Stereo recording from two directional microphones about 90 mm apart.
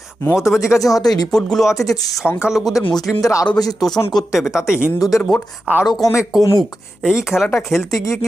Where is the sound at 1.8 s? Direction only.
40° left (ahead or behind).